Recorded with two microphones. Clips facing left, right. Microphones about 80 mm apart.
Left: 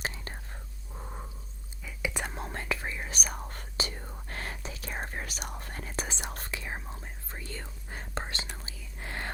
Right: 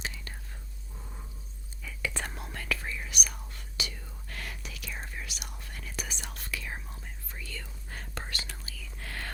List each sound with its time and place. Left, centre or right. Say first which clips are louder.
0.0 s whispering: left 3 dB; left
0.9 s a sound: left 6 dB; left
1.8 s whispering: left 1 dB; centre
2.4 s whispering: left 2 dB; left
4.9 s whispering: left 4 dB; left
7.9 s whispering: left 4 dB; left